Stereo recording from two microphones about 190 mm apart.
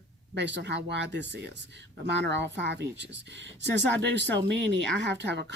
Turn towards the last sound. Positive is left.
turn(degrees=-65)  # may be behind; listen again after turning